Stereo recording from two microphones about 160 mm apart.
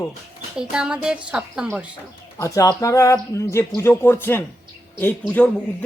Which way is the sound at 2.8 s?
20° left (ahead or behind).